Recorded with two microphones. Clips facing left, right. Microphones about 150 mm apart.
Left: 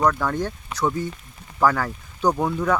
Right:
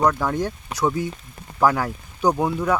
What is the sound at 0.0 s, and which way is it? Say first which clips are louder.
Speech: right 1 dB; 10° right (ahead or behind).